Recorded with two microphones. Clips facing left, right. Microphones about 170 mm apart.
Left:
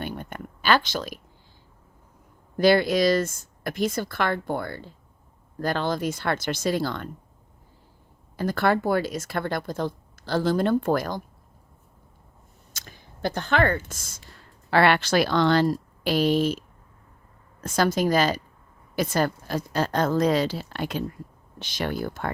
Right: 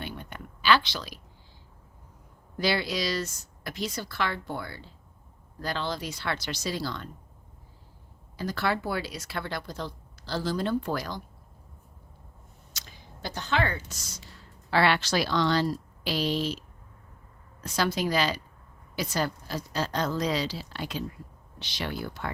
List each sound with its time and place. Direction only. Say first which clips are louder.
0.0 s a sound: left 5 dB; 50° left (ahead or behind)
2.6 s speech: left 9 dB; 50° left (ahead or behind)
8.4 s speech: left 6 dB; 50° left (ahead or behind)
12.7 s speech: left 2 dB; 50° left (ahead or behind)